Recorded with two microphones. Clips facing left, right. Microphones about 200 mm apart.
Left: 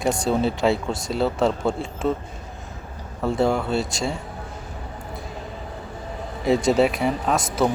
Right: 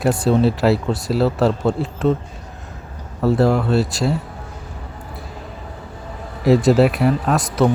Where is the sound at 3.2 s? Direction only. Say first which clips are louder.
Right 5 dB; 5° right (ahead or behind).